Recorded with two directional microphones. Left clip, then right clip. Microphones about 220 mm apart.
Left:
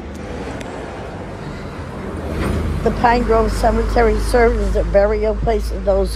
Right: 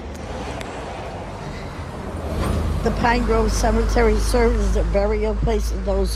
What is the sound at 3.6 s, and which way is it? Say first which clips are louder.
A woman's voice: left 4 dB; 5° right (ahead or behind).